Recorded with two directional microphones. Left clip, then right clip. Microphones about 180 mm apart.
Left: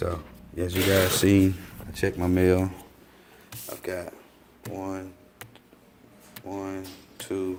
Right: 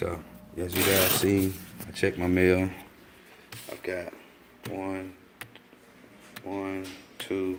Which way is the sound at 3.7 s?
10° left (ahead or behind).